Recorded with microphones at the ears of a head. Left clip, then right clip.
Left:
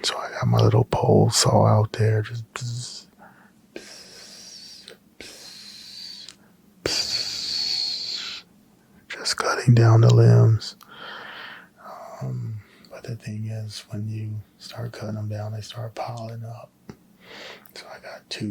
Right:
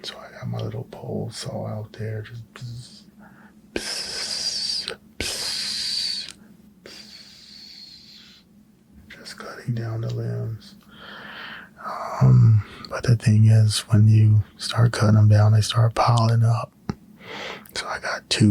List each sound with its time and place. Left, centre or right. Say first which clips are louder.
0.0 s speech: left 9 dB; left
3.8 s a sound: right 13 dB; right
6.8 s wheeze: left 18 dB; left
9.0 s speech: left 13 dB; left
11.8 s speech: right 12 dB; right